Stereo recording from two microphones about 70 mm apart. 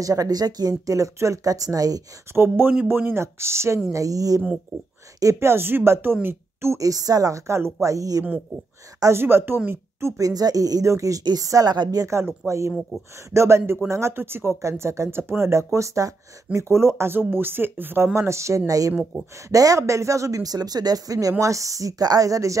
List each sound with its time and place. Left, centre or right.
0.0 s speech: right
2.3 s speech: right
3.9 s speech: right
5.2 s a woman's voice: right
6.8 s speech: right
9.0 s speech: right
10.1 s speech: right
11.7 s a woman's voice: right
12.1 s speech: right
18.7 s speech: right